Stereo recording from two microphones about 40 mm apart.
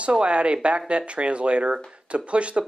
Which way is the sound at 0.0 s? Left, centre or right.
Right.